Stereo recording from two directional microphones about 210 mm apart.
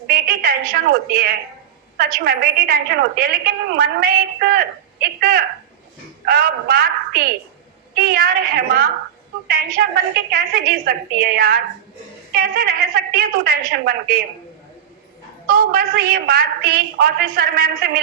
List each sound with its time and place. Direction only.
0.1 s a sound: 45° right (ahead or behind)
2.0 s a woman's voice: 45° right (ahead or behind)
15.4 s a woman's voice: 45° right (ahead or behind)